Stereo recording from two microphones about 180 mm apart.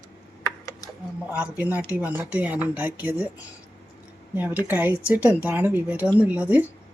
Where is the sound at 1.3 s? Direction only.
5° right (ahead or behind).